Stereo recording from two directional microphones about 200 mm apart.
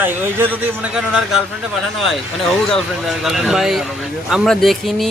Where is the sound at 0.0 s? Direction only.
10° right (ahead or behind).